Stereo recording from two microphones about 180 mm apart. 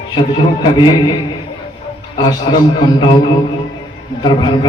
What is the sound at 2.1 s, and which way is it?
A man's voice, 25° left (ahead or behind).